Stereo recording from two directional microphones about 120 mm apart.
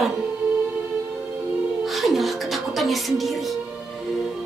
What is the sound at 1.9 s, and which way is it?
Music, centre (ahead or behind).